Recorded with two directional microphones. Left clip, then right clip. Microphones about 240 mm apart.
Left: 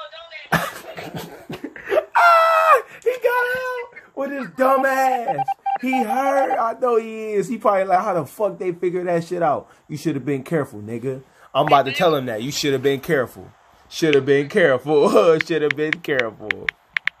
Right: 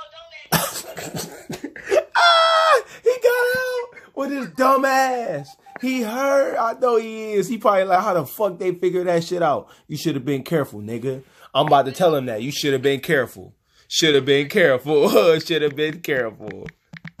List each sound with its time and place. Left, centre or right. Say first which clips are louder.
0.5 s cough: left 1 dB; centre
3.1 s a sound: right 2 dB; right
4.1 s speech: left 1 dB; right
5.8 s speech: right 1 dB; centre
16.6 s computer keyboard: left 16 dB; left